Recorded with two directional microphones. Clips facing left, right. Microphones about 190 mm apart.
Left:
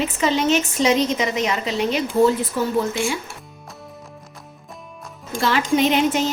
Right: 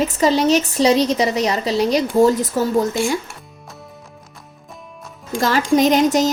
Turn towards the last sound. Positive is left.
turn(degrees=-40)  # may be behind; listen again after turning